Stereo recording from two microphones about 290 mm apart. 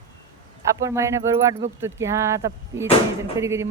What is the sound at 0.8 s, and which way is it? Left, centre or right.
Speech, centre.